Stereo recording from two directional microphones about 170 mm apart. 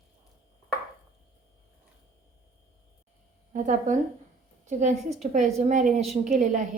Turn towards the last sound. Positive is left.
turn(degrees=-45)  # may be behind; listen again after turning